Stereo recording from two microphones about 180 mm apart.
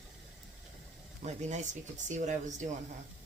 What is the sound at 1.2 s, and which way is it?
Speech, 40° right (ahead or behind).